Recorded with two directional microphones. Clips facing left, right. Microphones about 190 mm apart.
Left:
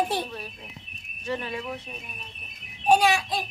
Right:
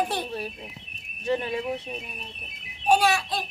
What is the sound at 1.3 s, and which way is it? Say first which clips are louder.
Speech: right 5 dB; 25° right (ahead or behind).